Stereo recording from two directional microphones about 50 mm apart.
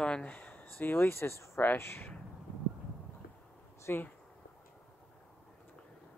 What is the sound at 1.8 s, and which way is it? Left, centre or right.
Speech, left.